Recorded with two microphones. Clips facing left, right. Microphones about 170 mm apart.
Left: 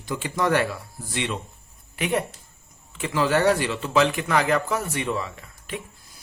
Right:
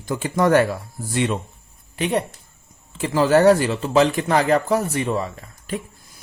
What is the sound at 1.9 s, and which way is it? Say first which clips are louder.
Speech: right 3 dB; 30° right (ahead or behind).